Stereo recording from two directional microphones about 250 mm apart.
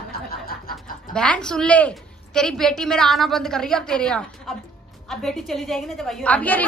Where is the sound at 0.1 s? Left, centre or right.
Left.